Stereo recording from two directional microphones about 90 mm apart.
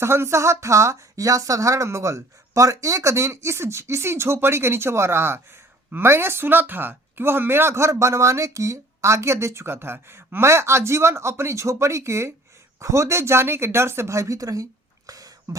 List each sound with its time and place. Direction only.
0.0 s speech: 30° right (ahead or behind)